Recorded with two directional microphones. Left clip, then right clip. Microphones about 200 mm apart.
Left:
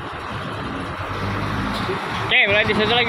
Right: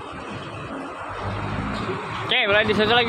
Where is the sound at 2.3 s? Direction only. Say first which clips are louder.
Left 2 dB; 20° right (ahead or behind).